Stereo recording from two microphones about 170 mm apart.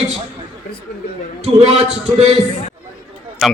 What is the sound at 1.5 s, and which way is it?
Speech, 35° right (ahead or behind).